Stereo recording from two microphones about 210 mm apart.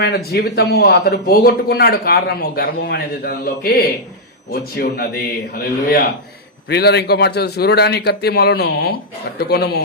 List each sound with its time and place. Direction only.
0.3 s speech: 50° left (ahead or behind)